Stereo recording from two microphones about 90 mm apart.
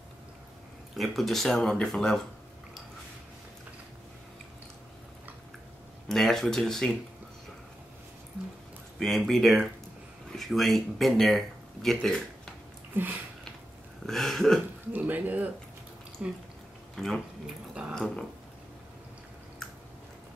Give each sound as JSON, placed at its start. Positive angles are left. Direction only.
{"t": 0.9, "sound": "speech", "side_deg": 0}
{"t": 6.0, "sound": "speech", "side_deg": 5}
{"t": 9.0, "sound": "speech", "side_deg": 0}
{"t": 12.9, "sound": "a sound", "side_deg": -25}
{"t": 14.0, "sound": "speech", "side_deg": 5}
{"t": 14.9, "sound": "speech", "side_deg": -20}
{"t": 16.9, "sound": "speech", "side_deg": 5}
{"t": 17.9, "sound": "a sound", "side_deg": 5}